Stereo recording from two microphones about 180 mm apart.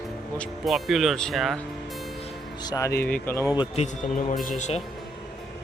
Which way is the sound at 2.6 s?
20° left (ahead or behind).